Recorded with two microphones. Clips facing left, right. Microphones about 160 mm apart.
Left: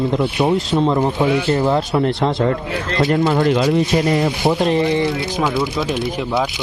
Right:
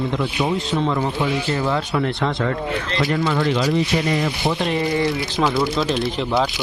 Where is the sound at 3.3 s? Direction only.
45° left (ahead or behind).